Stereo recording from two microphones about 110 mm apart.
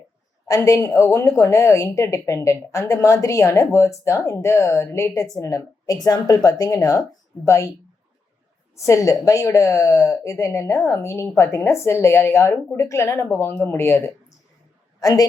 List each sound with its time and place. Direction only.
0.4 s speech: 30° left (ahead or behind)
8.8 s speech: 30° left (ahead or behind)
15.0 s a woman's voice: 35° left (ahead or behind)